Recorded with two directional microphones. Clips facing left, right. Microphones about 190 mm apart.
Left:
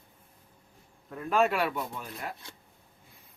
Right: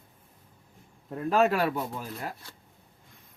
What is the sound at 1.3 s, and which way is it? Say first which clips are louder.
A man's voice: right 2 dB; 40° right (ahead or behind).